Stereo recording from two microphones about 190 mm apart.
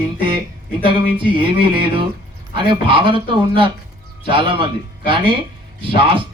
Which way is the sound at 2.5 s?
25° right (ahead or behind).